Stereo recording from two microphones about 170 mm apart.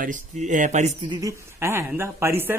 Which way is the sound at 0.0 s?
50° right (ahead or behind).